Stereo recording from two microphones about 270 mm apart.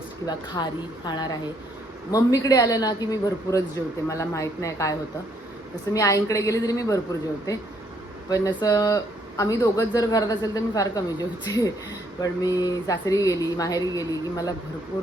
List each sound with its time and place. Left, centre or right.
0.3 s speech: centre
8.3 s speech: centre